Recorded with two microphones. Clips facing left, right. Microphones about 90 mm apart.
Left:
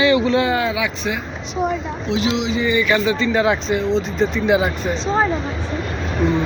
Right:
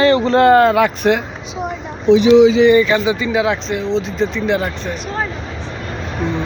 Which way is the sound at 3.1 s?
10° right (ahead or behind).